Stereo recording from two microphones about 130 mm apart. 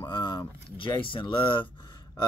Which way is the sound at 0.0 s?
35° left (ahead or behind).